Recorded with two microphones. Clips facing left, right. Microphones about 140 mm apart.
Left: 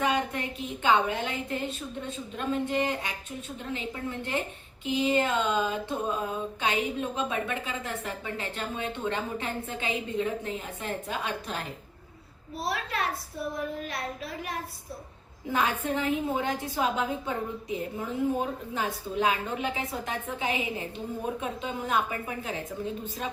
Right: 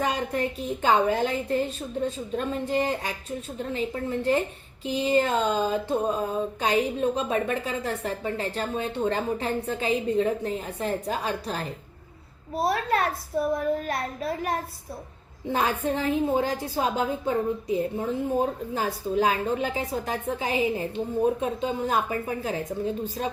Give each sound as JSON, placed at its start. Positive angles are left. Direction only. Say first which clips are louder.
{"t": 0.0, "sound": "a woman's voice", "louder": "right 2 dB", "side_deg": -40}
{"t": 12.5, "sound": "a woman's voice", "louder": "right 7 dB", "side_deg": -50}
{"t": 15.5, "sound": "a woman's voice", "louder": "right 2 dB", "side_deg": -35}